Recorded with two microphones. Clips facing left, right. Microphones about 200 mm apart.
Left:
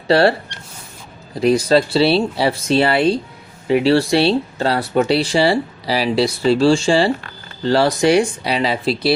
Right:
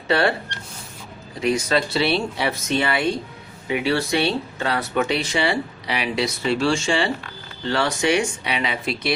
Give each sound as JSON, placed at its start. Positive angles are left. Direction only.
{"t": 0.1, "sound": "speech", "side_deg": 35}
{"t": 1.4, "sound": "speech", "side_deg": 35}